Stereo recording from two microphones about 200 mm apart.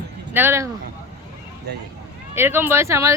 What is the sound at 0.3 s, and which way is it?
Speech, 10° right (ahead or behind).